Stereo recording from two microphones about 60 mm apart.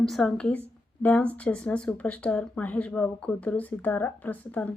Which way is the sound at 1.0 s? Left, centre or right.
Left.